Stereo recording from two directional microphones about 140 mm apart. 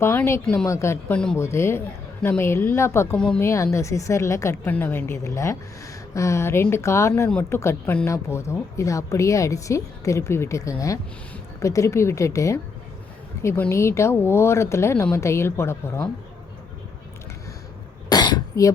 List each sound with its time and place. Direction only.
0.0 s a woman's voice: 20° left (ahead or behind)
0.4 s speech: 5° left (ahead or behind)
0.7 s speech: 20° left (ahead or behind)
1.4 s a woman's voice: 20° left (ahead or behind)
3.2 s speech: 5° left (ahead or behind)
3.4 s a woman's voice: 20° left (ahead or behind)
18.1 s throat clearing: 30° left (ahead or behind)